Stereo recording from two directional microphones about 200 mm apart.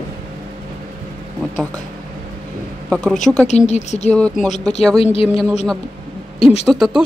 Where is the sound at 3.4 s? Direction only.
35° left (ahead or behind).